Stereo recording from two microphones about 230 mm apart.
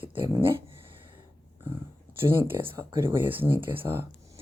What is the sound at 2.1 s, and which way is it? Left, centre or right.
Speech, centre.